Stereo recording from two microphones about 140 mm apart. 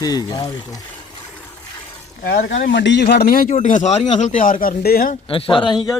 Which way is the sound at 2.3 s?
90° left.